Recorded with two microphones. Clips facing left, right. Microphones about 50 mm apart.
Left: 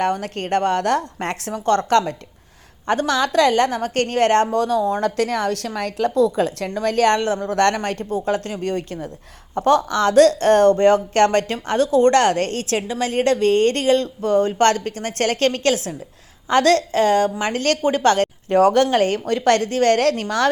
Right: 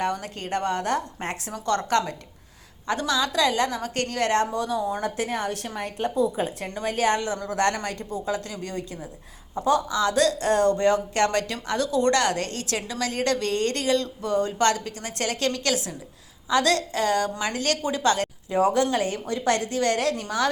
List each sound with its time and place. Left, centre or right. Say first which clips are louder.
0.0 s speech: left 6 dB; left
1.5 s a woman's voice: left 7 dB; left
17.4 s a woman's voice: left 6 dB; left